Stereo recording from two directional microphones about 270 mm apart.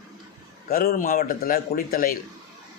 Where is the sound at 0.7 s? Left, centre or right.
Left.